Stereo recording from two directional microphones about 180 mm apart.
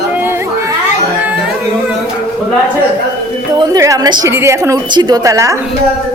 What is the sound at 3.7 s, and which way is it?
A woman's voice, 20° right (ahead or behind).